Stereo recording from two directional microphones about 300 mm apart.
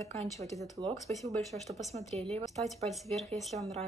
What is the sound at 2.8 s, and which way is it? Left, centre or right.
Speech, centre.